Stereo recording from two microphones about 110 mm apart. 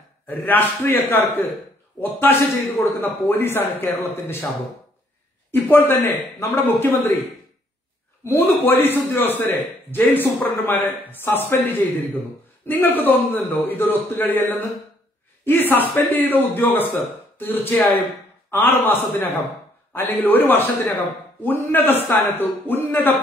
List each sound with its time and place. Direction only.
0.3 s a man's voice: 15° left (ahead or behind)
5.5 s a man's voice: 20° left (ahead or behind)
8.2 s a man's voice: 20° left (ahead or behind)